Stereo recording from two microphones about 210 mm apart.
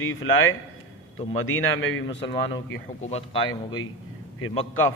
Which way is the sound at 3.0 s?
30° left (ahead or behind).